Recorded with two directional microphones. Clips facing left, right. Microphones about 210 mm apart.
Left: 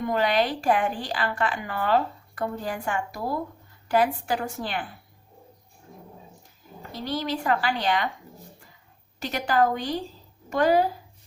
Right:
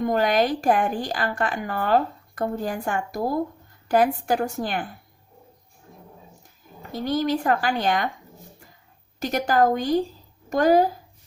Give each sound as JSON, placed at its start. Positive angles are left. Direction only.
{"t": 0.0, "sound": "a woman's voice", "side_deg": -45}
{"t": 6.9, "sound": "a woman's voice", "side_deg": -50}
{"t": 9.2, "sound": "a woman's voice", "side_deg": -45}